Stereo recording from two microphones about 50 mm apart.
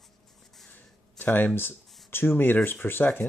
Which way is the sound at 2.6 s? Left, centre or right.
Left.